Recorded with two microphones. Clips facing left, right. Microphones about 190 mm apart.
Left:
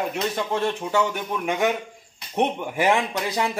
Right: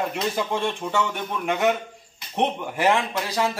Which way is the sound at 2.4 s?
Centre (ahead or behind).